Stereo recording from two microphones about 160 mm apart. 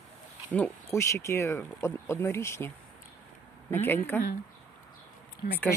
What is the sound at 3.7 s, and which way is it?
Speech, 15° left (ahead or behind).